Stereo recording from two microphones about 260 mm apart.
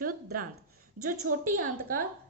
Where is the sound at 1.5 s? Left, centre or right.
Right.